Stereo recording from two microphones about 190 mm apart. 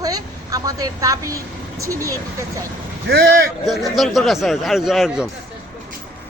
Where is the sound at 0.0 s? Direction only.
20° right (ahead or behind).